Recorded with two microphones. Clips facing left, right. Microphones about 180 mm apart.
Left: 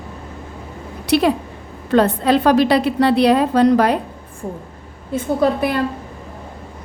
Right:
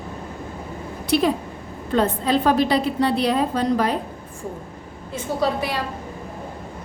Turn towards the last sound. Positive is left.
turn(degrees=55)  # may be behind; listen again after turning